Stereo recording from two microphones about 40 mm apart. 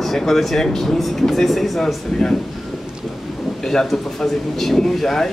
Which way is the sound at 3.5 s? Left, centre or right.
Centre.